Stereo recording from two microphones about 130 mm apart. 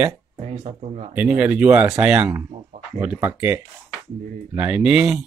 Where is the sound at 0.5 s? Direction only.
55° right (ahead or behind).